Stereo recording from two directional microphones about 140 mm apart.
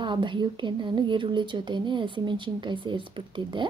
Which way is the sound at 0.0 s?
35° right (ahead or behind).